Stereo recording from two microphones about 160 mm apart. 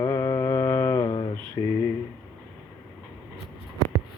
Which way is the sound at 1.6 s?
20° left (ahead or behind).